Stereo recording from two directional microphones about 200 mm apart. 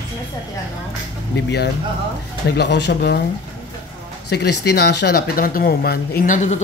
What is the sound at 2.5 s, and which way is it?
Speech, 60° left (ahead or behind).